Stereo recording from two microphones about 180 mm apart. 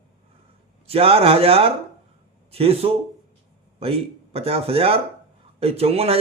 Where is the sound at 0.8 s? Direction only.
30° right (ahead or behind).